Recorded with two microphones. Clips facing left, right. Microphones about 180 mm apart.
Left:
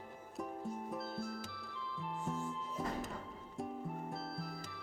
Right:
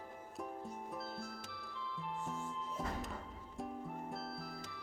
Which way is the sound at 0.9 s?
Centre (ahead or behind).